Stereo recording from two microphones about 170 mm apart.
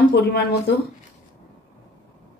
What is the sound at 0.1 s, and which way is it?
Speech, 70° left (ahead or behind).